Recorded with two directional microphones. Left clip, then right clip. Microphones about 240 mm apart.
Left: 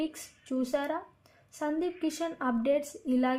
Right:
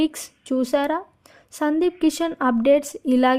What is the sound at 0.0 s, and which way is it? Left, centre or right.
A woman's voice, right.